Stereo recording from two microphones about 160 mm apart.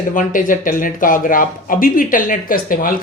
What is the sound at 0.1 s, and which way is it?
Speech, 55° left (ahead or behind).